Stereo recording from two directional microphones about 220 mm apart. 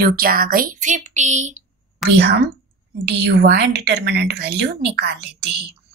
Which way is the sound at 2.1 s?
50° right (ahead or behind).